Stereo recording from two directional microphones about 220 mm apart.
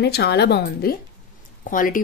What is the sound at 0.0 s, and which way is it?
Speech, 50° left (ahead or behind).